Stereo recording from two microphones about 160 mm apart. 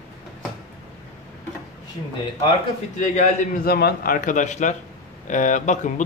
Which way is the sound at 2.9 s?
50° left (ahead or behind).